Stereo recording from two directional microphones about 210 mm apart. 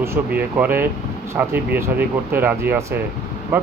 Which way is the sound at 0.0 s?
10° right (ahead or behind).